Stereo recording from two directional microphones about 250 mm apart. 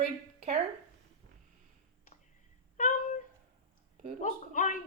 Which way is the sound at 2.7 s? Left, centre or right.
Left.